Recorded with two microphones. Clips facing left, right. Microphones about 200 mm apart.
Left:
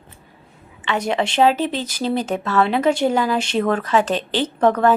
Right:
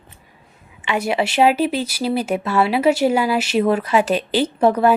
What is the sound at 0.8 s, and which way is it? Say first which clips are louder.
A woman's voice: right 1 dB; 10° right (ahead or behind).